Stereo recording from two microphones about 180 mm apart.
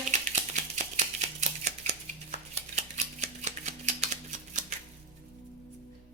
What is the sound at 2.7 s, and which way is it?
Typewriter, 40° right (ahead or behind).